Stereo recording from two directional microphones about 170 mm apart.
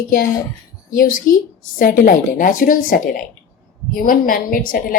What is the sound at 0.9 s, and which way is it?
A woman's voice, 55° left (ahead or behind).